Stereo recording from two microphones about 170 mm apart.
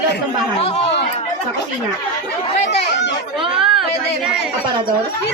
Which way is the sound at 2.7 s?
90° left.